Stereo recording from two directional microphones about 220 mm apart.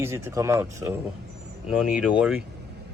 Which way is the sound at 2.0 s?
5° right (ahead or behind).